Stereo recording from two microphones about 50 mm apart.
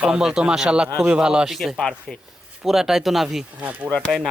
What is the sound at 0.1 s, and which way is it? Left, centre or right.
Speech, centre.